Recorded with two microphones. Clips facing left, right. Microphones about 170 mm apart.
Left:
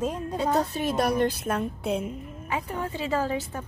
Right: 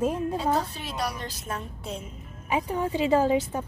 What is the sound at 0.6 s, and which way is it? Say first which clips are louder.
A woman's voice: left 7 dB; 50° left (ahead or behind).